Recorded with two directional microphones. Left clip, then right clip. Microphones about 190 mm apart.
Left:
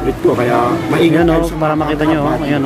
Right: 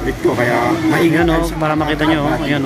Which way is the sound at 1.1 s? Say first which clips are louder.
Left 2 dB; 10° left (ahead or behind).